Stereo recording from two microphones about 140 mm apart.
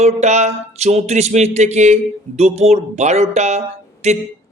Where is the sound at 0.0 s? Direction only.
55° right (ahead or behind).